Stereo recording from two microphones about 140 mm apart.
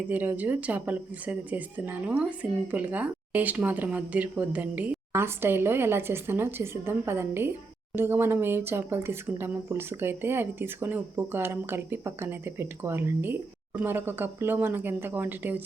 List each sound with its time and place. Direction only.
0.1 s speech: 10° right (ahead or behind)